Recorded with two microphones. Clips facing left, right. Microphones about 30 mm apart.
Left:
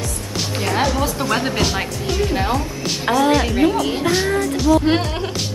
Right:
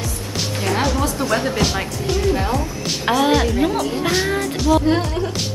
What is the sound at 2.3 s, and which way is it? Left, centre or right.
Speech, centre.